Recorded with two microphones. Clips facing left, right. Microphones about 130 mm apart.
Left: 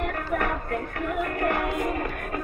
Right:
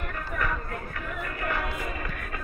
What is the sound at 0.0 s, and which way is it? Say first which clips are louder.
Music: left 6 dB; 70° left (ahead or behind).